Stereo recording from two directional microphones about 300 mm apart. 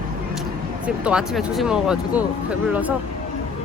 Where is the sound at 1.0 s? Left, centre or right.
Centre.